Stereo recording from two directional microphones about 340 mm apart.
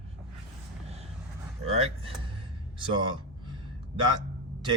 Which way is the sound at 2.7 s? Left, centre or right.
Centre.